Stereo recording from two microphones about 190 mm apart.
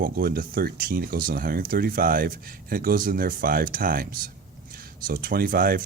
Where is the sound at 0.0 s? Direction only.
50° right (ahead or behind).